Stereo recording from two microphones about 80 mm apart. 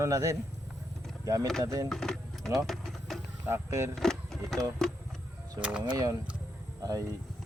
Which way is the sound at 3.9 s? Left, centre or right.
Centre.